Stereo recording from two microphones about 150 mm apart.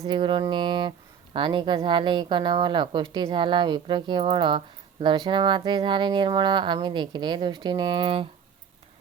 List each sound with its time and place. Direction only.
0.1 s speech: 35° right (ahead or behind)